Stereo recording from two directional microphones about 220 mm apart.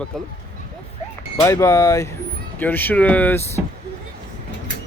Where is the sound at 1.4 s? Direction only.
15° left (ahead or behind).